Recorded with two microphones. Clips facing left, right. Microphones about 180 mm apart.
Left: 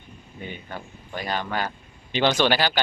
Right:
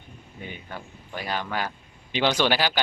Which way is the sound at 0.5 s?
5° right (ahead or behind).